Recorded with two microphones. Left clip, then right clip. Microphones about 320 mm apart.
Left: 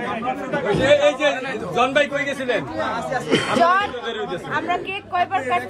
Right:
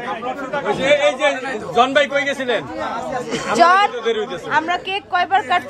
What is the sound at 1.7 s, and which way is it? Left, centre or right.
Speech, right.